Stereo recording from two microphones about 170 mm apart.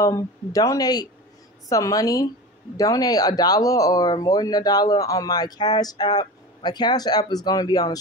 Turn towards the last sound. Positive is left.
turn(degrees=20)  # may be behind; listen again after turning